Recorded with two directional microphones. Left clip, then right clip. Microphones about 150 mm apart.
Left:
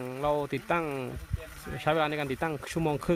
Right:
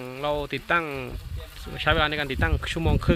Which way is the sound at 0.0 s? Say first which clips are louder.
Right 1 dB; 5° left (ahead or behind).